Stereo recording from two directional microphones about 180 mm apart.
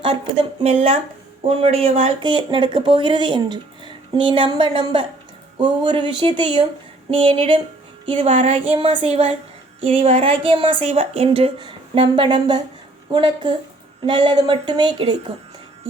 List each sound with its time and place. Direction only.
0.6 s speech: 35° right (ahead or behind)